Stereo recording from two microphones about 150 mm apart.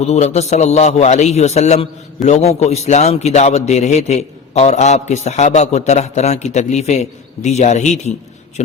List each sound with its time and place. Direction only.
0.0 s a man's voice: 50° left (ahead or behind)